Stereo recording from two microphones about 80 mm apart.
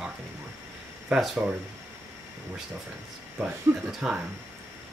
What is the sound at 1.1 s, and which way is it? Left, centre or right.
Speech, centre.